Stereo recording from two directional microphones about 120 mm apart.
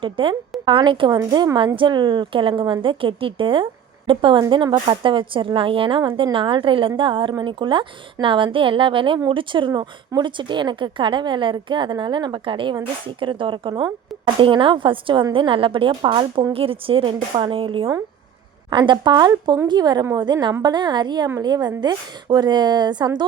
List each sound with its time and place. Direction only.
0.0 s a woman's voice: 45° right (ahead or behind)